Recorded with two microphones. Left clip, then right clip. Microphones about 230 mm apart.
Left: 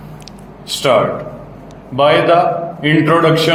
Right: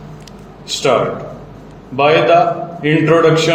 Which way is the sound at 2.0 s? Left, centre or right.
Left.